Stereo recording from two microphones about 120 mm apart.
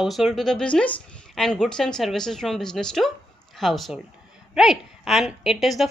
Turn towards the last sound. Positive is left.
turn(degrees=0)  # may be behind; listen again after turning